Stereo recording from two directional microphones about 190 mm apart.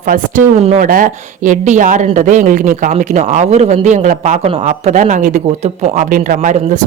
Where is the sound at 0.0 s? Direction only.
45° right (ahead or behind).